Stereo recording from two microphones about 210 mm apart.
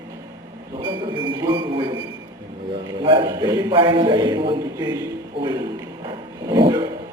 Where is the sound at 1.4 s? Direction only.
20° right (ahead or behind).